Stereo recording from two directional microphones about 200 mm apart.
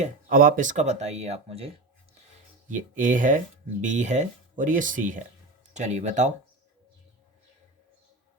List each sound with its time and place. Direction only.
0.0 s speech: 45° right (ahead or behind)